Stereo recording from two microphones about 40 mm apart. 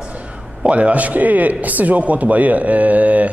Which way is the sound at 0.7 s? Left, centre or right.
Right.